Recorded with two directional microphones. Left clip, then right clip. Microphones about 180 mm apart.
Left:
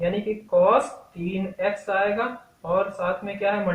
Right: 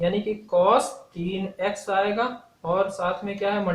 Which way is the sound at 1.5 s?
40° right (ahead or behind).